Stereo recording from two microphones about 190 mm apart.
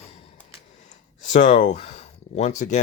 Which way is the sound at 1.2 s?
40° left (ahead or behind).